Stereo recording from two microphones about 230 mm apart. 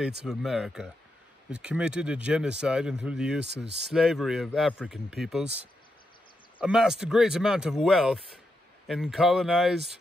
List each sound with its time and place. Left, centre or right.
0.3 s speech: centre
3.5 s speech: right
3.9 s speech: centre
6.6 s speech: centre